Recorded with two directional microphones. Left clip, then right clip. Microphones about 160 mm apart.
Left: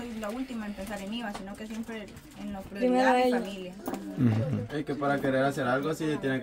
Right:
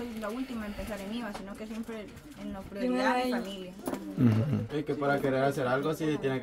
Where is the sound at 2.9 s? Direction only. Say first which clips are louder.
Left 5 dB; 15° left (ahead or behind).